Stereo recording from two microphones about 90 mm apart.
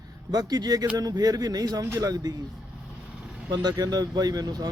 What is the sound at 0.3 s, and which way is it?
A man's voice, 45° right (ahead or behind).